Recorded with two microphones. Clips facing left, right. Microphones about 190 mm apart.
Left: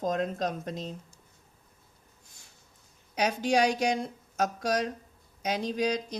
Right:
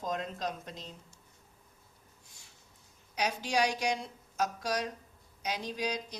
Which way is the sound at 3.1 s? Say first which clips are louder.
Left 5 dB; 50° left (ahead or behind).